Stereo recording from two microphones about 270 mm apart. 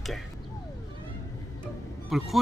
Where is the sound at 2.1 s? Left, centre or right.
Centre.